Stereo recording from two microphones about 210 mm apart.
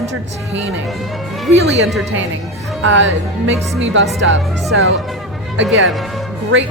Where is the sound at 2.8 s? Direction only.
60° right (ahead or behind).